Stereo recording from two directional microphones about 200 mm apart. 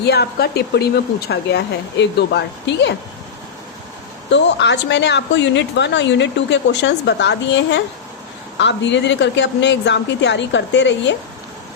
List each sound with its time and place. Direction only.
0.0 s a woman's voice: 55° left (ahead or behind)
4.3 s a woman's voice: 60° left (ahead or behind)